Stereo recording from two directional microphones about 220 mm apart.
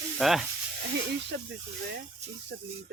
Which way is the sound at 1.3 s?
50° right (ahead or behind).